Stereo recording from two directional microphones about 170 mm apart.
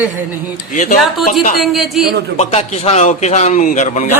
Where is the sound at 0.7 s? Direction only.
50° left (ahead or behind).